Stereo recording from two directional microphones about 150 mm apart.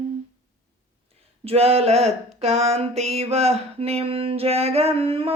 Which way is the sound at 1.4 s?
40° right (ahead or behind).